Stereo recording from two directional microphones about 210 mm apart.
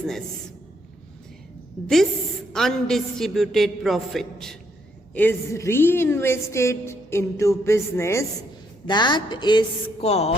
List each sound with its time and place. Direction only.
2.5 s a woman's voice: centre (ahead or behind); by 10.3 s 30° left (ahead or behind)